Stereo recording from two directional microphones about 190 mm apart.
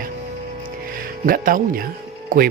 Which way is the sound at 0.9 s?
50° right (ahead or behind).